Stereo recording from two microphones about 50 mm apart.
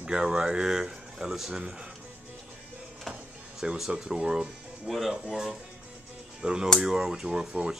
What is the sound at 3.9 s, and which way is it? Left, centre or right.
Speech, centre.